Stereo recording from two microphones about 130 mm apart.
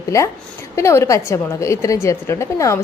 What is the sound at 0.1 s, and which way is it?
A woman's voice, 25° left (ahead or behind).